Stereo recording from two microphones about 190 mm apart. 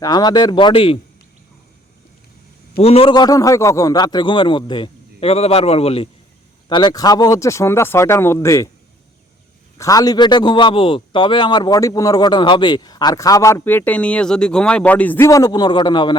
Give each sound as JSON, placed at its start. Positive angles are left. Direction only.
{"t": 0.0, "sound": "a man's voice", "side_deg": 20}
{"t": 2.7, "sound": "a man's voice", "side_deg": 30}
{"t": 9.7, "sound": "a man's voice", "side_deg": 20}